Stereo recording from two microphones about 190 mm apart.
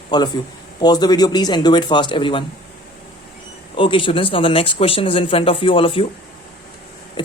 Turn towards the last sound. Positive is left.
turn(degrees=25)  # may be behind; listen again after turning